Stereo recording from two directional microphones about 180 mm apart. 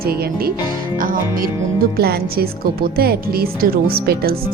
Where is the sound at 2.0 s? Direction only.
60° right (ahead or behind).